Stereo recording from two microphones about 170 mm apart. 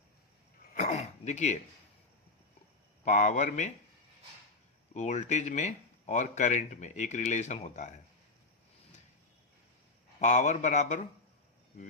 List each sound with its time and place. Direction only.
0.7 s throat clearing: 40° left (ahead or behind)
3.0 s speech: 45° left (ahead or behind)
4.9 s speech: 45° left (ahead or behind)
10.2 s speech: 45° left (ahead or behind)